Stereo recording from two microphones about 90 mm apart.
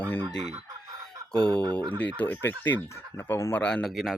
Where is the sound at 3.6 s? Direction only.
5° left (ahead or behind).